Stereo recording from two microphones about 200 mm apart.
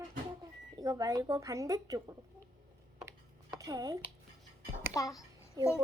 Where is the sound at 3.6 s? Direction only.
20° right (ahead or behind).